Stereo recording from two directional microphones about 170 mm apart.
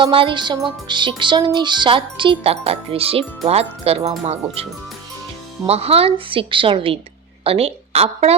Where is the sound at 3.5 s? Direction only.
35° right (ahead or behind).